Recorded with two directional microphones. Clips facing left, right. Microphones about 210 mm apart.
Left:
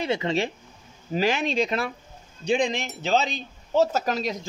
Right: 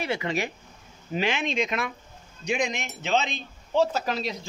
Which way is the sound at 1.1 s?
40° left (ahead or behind).